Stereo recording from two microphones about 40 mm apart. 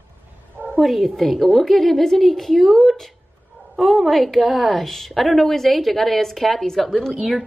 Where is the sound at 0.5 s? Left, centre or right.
Right.